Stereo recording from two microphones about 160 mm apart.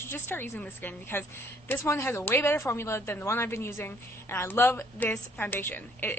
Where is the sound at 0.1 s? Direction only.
15° left (ahead or behind).